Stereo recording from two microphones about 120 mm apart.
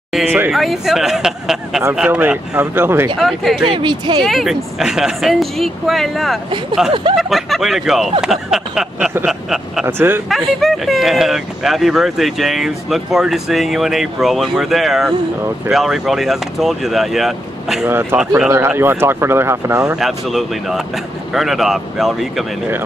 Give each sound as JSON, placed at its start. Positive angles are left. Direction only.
{"t": 0.5, "sound": "speech", "side_deg": 0}
{"t": 3.2, "sound": "speech", "side_deg": 0}
{"t": 3.6, "sound": "speech", "side_deg": -45}
{"t": 4.2, "sound": "speech", "side_deg": 0}
{"t": 9.8, "sound": "speech", "side_deg": -20}
{"t": 10.3, "sound": "speech", "side_deg": 0}
{"t": 17.8, "sound": "speech", "side_deg": -20}
{"t": 20.0, "sound": "speech", "side_deg": 0}